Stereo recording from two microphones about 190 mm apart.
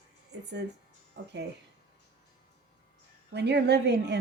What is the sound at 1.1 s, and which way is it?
Speech, 65° right (ahead or behind).